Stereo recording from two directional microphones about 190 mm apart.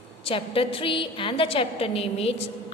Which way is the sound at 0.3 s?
30° left (ahead or behind).